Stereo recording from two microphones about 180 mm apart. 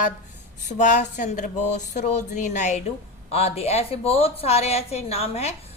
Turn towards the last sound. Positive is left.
turn(degrees=35)  # may be behind; listen again after turning